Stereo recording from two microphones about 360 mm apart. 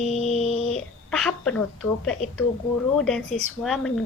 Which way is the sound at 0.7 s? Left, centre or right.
Centre.